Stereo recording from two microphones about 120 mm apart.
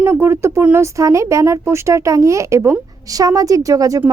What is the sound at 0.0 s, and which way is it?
A woman's voice, 20° right (ahead or behind).